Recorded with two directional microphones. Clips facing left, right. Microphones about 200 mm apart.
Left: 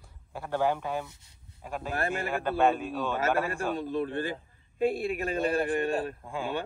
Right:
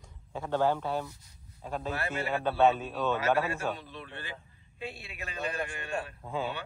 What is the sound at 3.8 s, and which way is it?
A man's voice, 45° left (ahead or behind).